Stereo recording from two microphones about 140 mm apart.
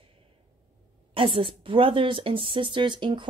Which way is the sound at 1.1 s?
40° right (ahead or behind).